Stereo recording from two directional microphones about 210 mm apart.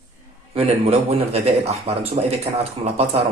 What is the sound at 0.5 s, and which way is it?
Speech, 30° right (ahead or behind).